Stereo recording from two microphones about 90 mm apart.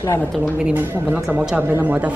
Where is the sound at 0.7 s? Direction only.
15° right (ahead or behind).